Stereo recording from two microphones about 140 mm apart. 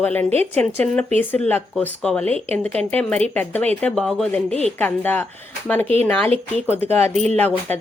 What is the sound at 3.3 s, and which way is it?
A woman's voice, 10° left (ahead or behind).